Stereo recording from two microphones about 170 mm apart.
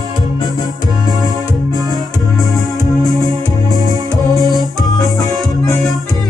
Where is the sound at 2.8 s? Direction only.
25° left (ahead or behind).